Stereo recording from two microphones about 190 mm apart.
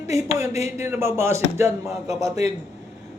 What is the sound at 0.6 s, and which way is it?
Speech, 15° right (ahead or behind).